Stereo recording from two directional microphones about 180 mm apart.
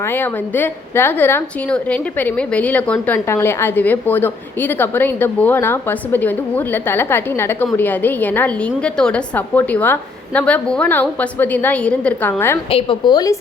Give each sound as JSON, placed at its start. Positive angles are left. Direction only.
{"t": 0.0, "sound": "a woman's voice", "side_deg": 10}
{"t": 12.7, "sound": "a woman's voice", "side_deg": 25}